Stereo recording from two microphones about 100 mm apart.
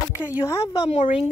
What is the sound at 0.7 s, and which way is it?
Speech, 85° left.